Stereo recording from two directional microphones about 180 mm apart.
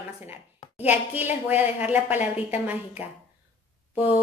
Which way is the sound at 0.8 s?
10° right (ahead or behind).